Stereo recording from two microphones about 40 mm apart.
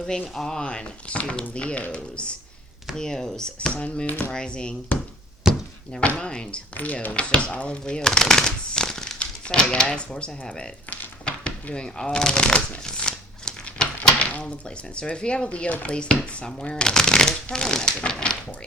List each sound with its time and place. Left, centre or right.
0.3 s speech: centre
2.9 s speech: centre
3.8 s speech: left
4.3 s speech: left
5.5 s chopping: centre
6.0 s speech: left
6.7 s speech: left
7.1 s speech: left
10.8 s shuffling cards: left
14.1 s dishes: left
14.9 s speech: left